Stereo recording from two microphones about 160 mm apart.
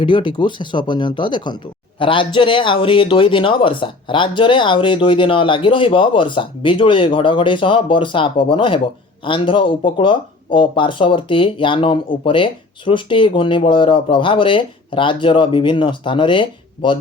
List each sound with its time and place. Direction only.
0.0 s speech: 30° left (ahead or behind)